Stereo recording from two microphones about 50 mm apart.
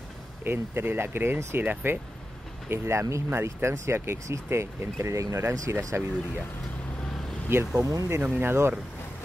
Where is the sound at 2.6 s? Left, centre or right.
Right.